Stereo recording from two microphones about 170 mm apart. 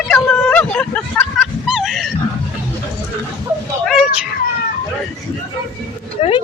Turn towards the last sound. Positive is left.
turn(degrees=35)  # may be behind; listen again after turning